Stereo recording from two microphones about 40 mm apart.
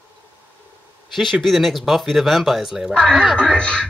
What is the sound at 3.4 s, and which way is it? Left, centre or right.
Speech, left.